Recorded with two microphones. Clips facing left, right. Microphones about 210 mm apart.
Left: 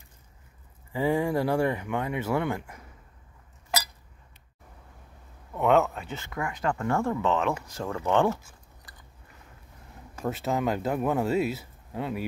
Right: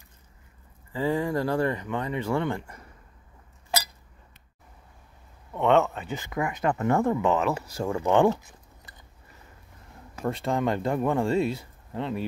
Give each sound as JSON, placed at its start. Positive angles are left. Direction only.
{"t": 0.9, "sound": "speech", "side_deg": 10}
{"t": 5.5, "sound": "speech", "side_deg": 5}
{"t": 6.0, "sound": "speech", "side_deg": -15}
{"t": 10.1, "sound": "speech", "side_deg": 5}